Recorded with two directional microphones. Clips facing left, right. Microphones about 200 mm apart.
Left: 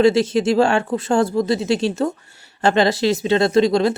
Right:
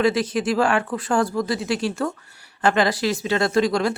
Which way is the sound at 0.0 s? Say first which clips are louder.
Left 5 dB; 25° left (ahead or behind).